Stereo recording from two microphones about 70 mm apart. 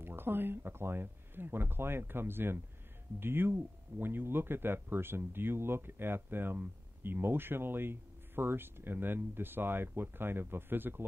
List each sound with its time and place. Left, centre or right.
0.0 s speech: right